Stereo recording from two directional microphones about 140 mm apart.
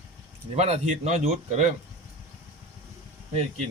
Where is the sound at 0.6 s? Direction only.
50° right (ahead or behind).